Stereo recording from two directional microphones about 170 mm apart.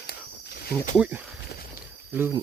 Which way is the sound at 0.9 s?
10° right (ahead or behind).